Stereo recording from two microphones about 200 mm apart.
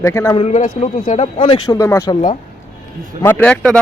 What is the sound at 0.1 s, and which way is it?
Speech, 15° left (ahead or behind).